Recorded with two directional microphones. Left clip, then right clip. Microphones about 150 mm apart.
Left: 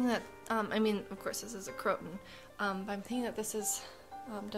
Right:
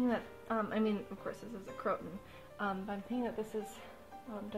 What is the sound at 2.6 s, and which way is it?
Speech, 25° left (ahead or behind).